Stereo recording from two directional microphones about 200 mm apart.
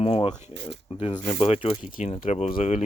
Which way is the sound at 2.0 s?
40° left (ahead or behind).